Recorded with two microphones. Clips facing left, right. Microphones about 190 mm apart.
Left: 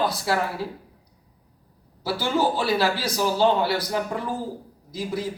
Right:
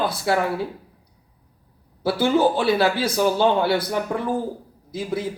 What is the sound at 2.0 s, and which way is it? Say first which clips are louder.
A man's voice: right 5 dB; 55° right (ahead or behind).